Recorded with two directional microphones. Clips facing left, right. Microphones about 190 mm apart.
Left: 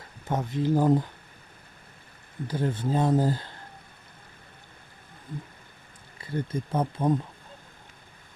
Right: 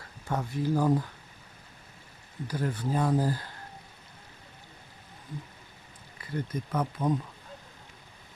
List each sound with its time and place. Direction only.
0.3 s speech: 20° left (ahead or behind)
2.5 s speech: 25° left (ahead or behind)
6.1 s speech: 30° left (ahead or behind)